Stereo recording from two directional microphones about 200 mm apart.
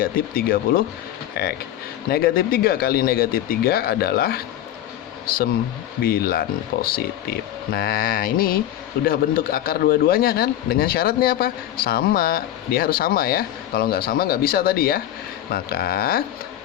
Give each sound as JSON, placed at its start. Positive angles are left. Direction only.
{"t": 0.0, "sound": "a man's voice", "side_deg": 45}
{"t": 6.0, "sound": "a man's voice", "side_deg": 50}
{"t": 7.7, "sound": "a man's voice", "side_deg": 45}